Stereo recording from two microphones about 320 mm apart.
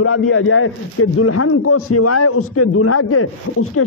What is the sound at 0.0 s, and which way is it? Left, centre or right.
A man's voice, left.